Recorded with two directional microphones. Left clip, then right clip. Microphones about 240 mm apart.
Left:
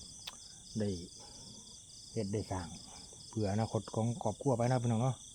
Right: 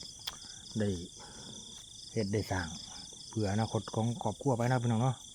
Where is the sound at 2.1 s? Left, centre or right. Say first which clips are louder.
Right 4 dB; centre.